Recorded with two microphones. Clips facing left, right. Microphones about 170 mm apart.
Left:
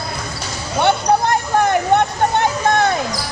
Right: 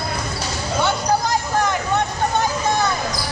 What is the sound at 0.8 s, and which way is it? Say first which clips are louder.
Vehicle: left 5 dB; 65° left (ahead or behind).